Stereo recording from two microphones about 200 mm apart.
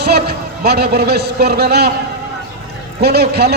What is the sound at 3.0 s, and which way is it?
Speech, 55° right (ahead or behind).